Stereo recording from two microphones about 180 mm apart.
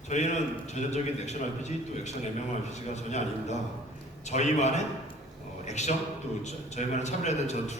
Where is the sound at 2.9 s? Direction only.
40° left (ahead or behind).